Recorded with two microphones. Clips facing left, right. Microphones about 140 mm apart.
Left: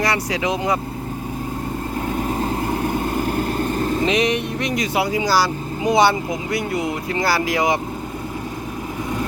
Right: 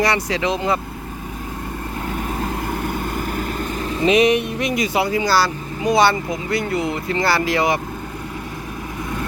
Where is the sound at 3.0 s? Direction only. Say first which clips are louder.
Left 3 dB; 40° left (ahead or behind).